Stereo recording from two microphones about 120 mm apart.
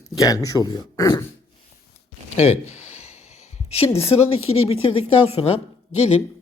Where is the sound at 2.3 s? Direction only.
60° left (ahead or behind).